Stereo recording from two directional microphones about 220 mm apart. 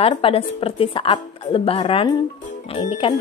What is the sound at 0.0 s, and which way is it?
Speech, 25° left (ahead or behind).